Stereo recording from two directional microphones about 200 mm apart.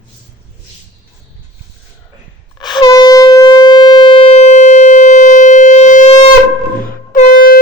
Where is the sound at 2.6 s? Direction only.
20° left (ahead or behind); by 6.3 s 35° left (ahead or behind).